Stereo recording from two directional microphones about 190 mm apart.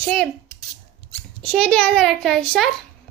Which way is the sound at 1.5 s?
5° left (ahead or behind).